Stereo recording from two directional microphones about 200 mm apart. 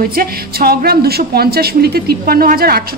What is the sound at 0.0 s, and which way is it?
A woman's voice, 50° right (ahead or behind).